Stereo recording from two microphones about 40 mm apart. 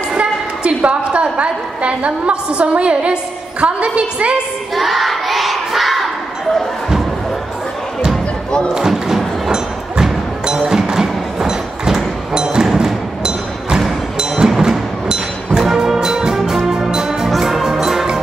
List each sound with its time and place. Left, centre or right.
0.2 s a woman's voice: right
4.7 s crowd: centre
8.7 s a sound: centre
10.4 s music: centre